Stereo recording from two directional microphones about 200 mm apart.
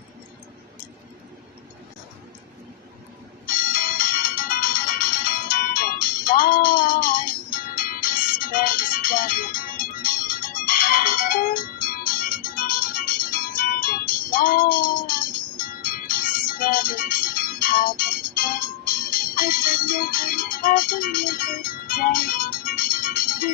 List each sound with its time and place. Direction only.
3.4 s music: 45° left (ahead or behind)